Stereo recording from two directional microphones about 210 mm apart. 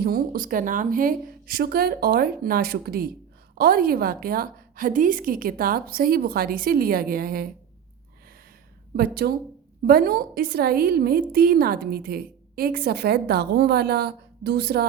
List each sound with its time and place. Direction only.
0.0 s a woman's voice: 40° right (ahead or behind)
9.0 s a woman's voice: 50° right (ahead or behind)